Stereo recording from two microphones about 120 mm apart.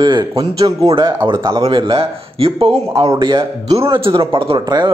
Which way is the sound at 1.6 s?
45° right (ahead or behind).